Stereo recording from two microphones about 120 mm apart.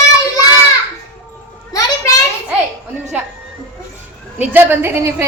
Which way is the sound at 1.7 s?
30° left (ahead or behind).